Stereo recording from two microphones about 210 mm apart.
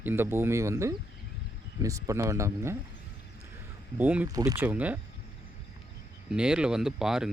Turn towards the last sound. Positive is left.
turn(degrees=-5)  # may be behind; listen again after turning